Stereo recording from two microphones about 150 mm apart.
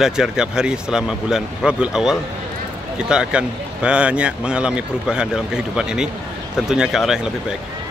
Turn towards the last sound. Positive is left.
turn(degrees=-5)  # may be behind; listen again after turning